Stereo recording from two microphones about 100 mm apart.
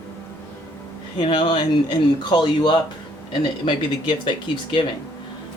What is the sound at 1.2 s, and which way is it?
Speech, 55° left (ahead or behind).